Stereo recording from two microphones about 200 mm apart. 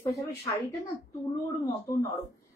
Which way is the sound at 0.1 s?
15° left (ahead or behind).